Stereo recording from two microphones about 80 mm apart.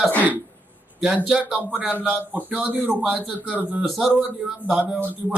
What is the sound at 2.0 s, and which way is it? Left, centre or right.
Speech, right.